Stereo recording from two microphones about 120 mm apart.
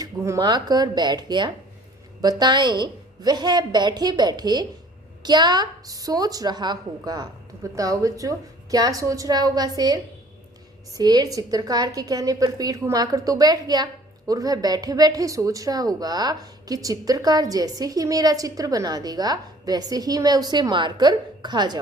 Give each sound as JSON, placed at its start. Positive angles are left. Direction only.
{"t": 0.0, "sound": "a woman's voice", "side_deg": -30}